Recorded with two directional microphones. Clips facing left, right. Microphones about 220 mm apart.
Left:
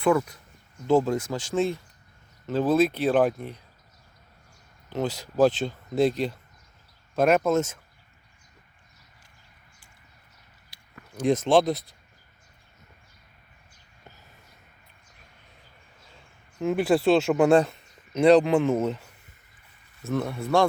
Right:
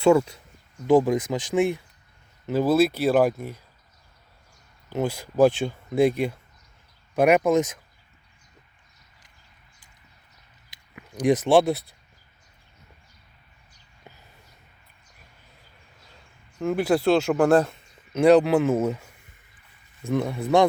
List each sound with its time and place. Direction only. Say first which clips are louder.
0.0 s speech: right 4 dB; 25° right (ahead or behind)
0.9 s speech: right 3 dB; 15° right (ahead or behind)
4.9 s speech: right 2 dB; 10° right (ahead or behind)
10.7 s a sound: right 3 dB; 15° right (ahead or behind)
11.4 s speech: right 2 dB; 10° right (ahead or behind)
16.1 s speech: even; centre (ahead or behind)
20.1 s speech: right 3 dB; 15° right (ahead or behind)